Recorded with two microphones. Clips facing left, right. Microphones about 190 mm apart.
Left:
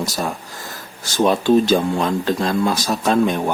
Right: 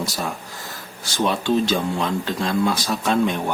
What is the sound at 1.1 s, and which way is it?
Speech, 45° left (ahead or behind).